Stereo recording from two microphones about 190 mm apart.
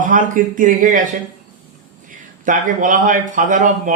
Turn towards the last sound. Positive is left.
turn(degrees=-45)  # may be behind; listen again after turning